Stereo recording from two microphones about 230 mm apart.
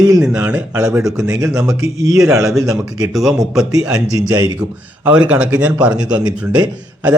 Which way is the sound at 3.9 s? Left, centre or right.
Centre.